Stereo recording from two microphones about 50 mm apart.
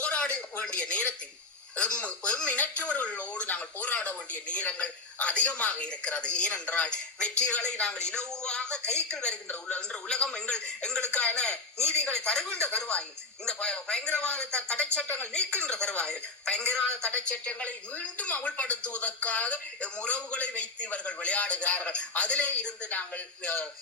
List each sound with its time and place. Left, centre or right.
0.0 s a sound: left
1.7 s speech: left
17.1 s speech: left